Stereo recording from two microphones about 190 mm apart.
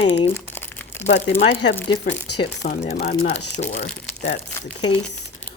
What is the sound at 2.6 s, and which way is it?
Speech, 45° left (ahead or behind).